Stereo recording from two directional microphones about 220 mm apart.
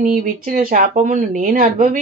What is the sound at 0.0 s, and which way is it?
A woman's voice, 35° right (ahead or behind).